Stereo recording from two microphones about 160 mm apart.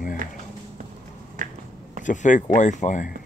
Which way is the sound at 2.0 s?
50° left (ahead or behind).